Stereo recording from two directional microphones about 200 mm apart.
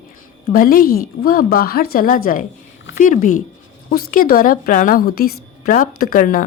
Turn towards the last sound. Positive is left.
turn(degrees=45)  # may be behind; listen again after turning